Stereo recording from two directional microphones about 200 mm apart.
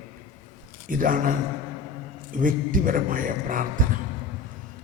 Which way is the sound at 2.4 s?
40° right (ahead or behind).